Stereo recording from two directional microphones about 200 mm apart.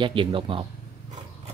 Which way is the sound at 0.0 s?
25° right (ahead or behind).